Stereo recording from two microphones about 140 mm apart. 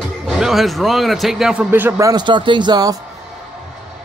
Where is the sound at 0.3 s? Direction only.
Centre (ahead or behind); by 3.0 s 30° right (ahead or behind).